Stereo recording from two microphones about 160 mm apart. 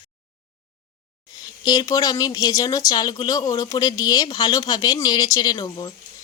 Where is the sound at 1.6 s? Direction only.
25° left (ahead or behind).